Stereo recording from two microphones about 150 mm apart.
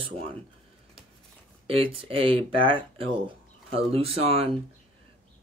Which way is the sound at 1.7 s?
40° right (ahead or behind).